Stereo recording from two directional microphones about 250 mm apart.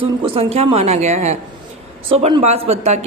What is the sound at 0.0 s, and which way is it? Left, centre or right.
A woman's voice, right.